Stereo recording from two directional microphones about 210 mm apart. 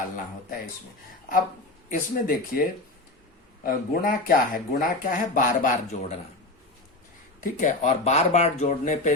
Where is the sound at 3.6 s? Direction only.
40° left (ahead or behind).